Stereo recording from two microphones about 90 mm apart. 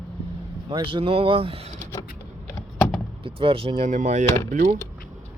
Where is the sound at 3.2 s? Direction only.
85° right.